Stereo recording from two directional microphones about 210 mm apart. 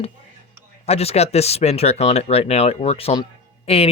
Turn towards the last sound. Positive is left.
turn(degrees=30)  # may be behind; listen again after turning